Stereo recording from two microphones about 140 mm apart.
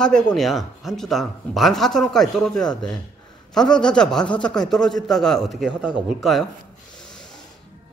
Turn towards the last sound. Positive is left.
turn(degrees=5)  # may be behind; listen again after turning